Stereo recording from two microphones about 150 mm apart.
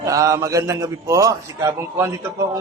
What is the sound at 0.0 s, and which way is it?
A man's voice, 20° right (ahead or behind).